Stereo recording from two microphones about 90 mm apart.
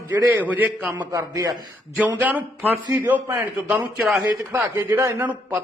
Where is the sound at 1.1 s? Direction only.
40° right (ahead or behind).